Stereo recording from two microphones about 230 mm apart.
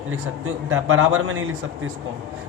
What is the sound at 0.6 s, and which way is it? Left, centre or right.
Speech, right.